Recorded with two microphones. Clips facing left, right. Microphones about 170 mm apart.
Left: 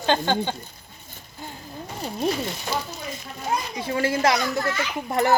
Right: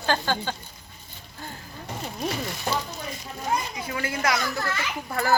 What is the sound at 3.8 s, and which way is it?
Speech, 30° left (ahead or behind).